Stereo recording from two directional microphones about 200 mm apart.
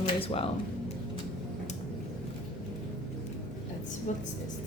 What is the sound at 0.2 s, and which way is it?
Speech, 30° left (ahead or behind).